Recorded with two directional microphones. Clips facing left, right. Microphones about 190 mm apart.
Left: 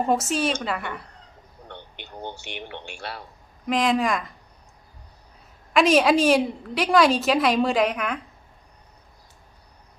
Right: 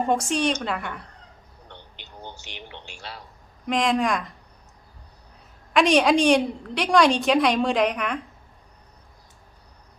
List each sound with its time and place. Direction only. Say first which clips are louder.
0.1 s a woman's voice: right 1 dB; 5° left (ahead or behind)
1.6 s a man's voice: left 5 dB; 55° left (ahead or behind)
3.7 s a woman's voice: even; centre (ahead or behind)
5.7 s a woman's voice: even; centre (ahead or behind)